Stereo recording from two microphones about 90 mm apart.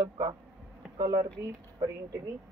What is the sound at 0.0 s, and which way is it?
A woman's voice, 50° right (ahead or behind).